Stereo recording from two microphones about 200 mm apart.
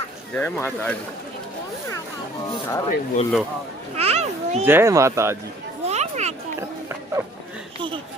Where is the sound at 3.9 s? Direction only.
30° right (ahead or behind).